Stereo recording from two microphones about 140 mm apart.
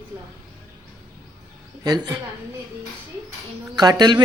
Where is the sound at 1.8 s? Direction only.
30° right (ahead or behind).